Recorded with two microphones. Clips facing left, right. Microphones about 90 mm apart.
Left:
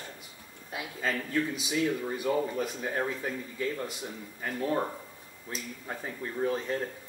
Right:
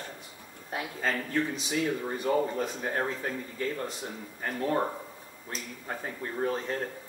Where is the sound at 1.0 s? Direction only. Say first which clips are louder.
Even; 35° right (ahead or behind).